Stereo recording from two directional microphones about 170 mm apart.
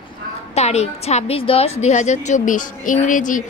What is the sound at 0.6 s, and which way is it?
A woman's voice, 40° left (ahead or behind).